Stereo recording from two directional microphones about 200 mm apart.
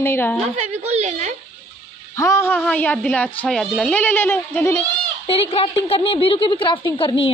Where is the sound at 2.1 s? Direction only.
15° left (ahead or behind).